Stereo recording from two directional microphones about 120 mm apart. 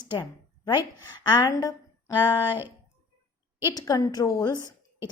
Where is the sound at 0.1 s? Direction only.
35° left (ahead or behind).